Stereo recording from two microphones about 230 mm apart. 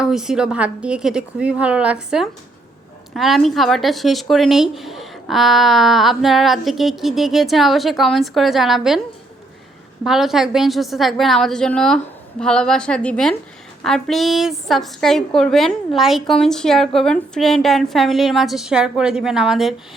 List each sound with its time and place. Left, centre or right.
0.0 s a woman's voice: centre
10.0 s a woman's voice: centre